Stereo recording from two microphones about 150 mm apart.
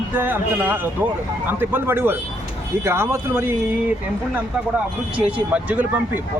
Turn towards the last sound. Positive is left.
turn(degrees=-10)  # may be behind; listen again after turning